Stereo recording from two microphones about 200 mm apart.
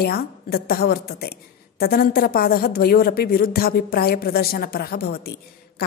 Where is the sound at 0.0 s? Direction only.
50° left (ahead or behind).